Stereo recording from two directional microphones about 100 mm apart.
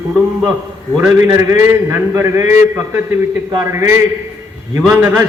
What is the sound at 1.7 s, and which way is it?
A man's voice, 25° right (ahead or behind).